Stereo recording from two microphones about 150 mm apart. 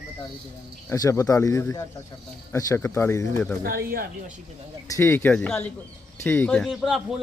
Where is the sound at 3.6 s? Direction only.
75° right (ahead or behind).